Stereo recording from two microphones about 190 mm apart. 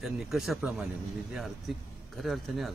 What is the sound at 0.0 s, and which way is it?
Speech, centre (ahead or behind).